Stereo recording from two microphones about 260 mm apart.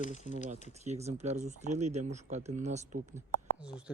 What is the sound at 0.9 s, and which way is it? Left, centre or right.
Speech, right.